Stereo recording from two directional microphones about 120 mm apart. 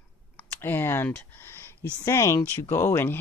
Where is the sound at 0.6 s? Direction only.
20° left (ahead or behind).